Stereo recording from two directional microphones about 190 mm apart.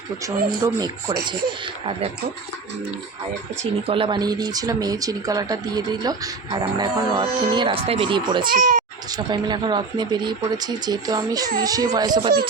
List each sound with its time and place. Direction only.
0.2 s speech: 20° right (ahead or behind)
3.8 s speech: 25° right (ahead or behind)
8.4 s speech: 45° right (ahead or behind)
9.0 s speech: 20° right (ahead or behind)